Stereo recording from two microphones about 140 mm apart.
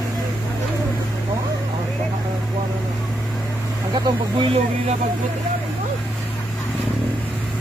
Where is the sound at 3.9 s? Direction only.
35° right (ahead or behind).